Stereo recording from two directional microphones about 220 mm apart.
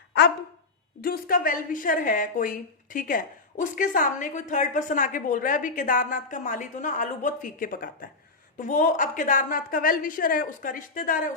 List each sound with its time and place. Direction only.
1.0 s a woman's voice: 40° left (ahead or behind)